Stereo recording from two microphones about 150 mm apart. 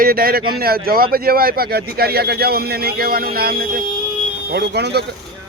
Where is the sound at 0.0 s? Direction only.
80° right.